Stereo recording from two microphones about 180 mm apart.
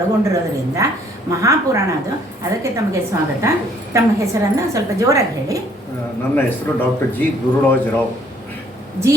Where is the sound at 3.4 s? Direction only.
15° right (ahead or behind).